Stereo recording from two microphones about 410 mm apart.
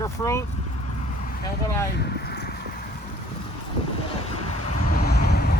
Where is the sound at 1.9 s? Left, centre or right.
Left.